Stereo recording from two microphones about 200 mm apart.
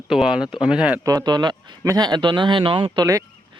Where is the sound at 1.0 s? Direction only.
20° right (ahead or behind).